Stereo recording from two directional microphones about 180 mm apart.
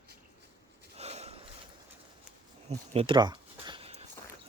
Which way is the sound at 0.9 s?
35° right (ahead or behind).